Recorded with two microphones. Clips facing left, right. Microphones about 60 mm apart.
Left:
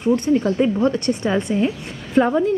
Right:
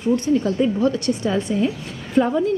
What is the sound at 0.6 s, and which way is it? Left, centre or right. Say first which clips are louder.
A woman's voice: left 1 dB; left.